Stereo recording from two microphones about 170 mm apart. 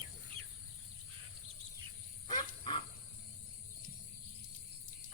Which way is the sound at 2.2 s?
25° left (ahead or behind).